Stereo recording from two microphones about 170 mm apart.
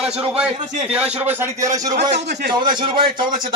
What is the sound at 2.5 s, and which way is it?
A man's voice, 25° right (ahead or behind).